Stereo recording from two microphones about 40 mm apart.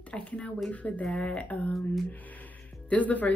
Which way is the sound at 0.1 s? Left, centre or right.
Left.